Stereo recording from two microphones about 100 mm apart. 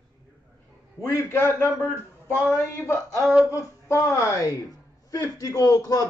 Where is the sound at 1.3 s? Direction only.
25° left (ahead or behind).